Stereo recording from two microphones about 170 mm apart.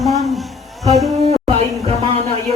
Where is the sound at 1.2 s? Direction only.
35° right (ahead or behind).